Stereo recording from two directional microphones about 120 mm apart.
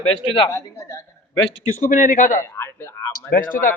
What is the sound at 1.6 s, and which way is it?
Speech, 90° left.